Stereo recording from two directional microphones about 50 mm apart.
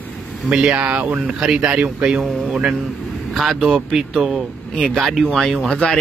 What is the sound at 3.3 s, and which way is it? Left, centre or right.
Speech, centre.